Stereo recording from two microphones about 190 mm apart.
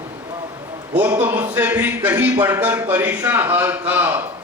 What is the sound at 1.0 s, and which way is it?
A man's voice, 10° right (ahead or behind).